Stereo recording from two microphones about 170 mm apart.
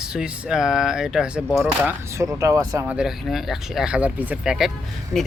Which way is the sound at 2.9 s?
5° right (ahead or behind).